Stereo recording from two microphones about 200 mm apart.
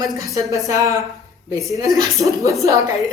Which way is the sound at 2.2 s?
15° right (ahead or behind).